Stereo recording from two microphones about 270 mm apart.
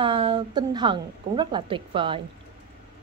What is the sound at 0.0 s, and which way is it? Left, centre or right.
A woman's voice, centre.